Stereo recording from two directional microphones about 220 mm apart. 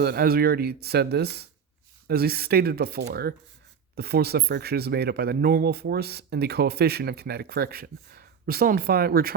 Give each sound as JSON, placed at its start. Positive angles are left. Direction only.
{"t": 0.0, "sound": "speech", "side_deg": -45}